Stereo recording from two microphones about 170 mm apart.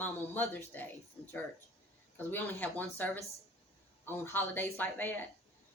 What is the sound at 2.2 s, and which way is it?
A woman's voice, 10° left (ahead or behind).